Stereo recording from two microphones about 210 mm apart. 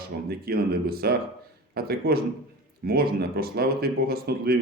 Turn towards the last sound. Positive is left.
turn(degrees=-45)  # may be behind; listen again after turning